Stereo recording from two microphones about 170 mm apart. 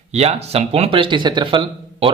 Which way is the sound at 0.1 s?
40° right (ahead or behind).